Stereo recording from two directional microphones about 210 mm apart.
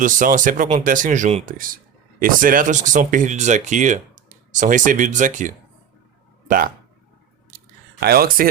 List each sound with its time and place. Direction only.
0.0 s speech: 40° right (ahead or behind)
8.0 s speech: 45° right (ahead or behind)